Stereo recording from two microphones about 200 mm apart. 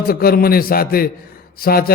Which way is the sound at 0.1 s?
50° left (ahead or behind).